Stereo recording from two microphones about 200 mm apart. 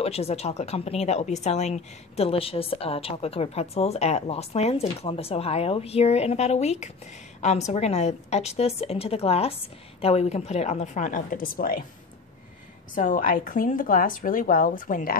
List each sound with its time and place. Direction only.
0.0 s a woman's voice: 30° left (ahead or behind); by 11.8 s 45° left (ahead or behind)
12.9 s a woman's voice: 45° left (ahead or behind)